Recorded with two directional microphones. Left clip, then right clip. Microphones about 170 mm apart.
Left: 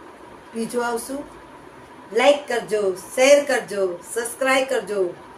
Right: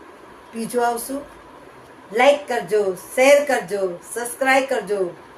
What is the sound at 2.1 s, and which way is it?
Speech, 15° right (ahead or behind).